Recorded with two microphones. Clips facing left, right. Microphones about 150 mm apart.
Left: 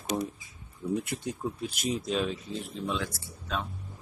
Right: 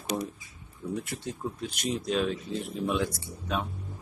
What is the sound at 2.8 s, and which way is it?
Speech, 15° right (ahead or behind).